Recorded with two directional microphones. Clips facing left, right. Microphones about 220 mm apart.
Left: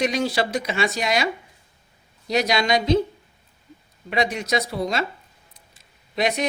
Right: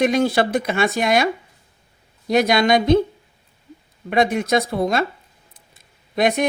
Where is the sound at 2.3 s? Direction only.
55° right (ahead or behind).